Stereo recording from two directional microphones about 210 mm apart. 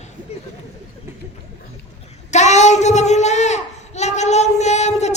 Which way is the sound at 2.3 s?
35° left (ahead or behind).